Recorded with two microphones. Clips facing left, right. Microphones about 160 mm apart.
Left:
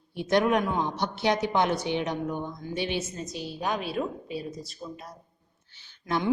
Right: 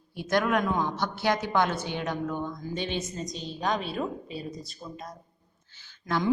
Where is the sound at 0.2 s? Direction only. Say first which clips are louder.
Left 2 dB; 20° left (ahead or behind); by 5.0 s centre (ahead or behind).